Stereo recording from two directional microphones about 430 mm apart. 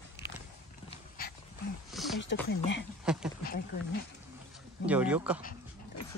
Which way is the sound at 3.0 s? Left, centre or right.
Centre.